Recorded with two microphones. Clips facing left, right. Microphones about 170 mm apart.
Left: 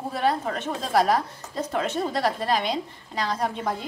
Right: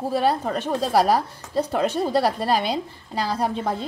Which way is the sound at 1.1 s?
35° right (ahead or behind).